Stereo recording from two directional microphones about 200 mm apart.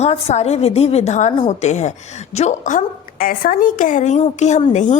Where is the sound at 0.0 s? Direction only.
30° left (ahead or behind).